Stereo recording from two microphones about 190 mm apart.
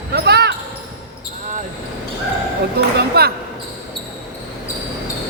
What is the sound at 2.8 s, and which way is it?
Speech, 60° right (ahead or behind).